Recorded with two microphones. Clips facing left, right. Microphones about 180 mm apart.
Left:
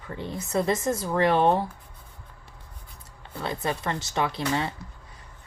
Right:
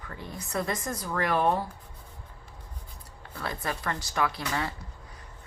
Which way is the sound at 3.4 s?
25° left (ahead or behind).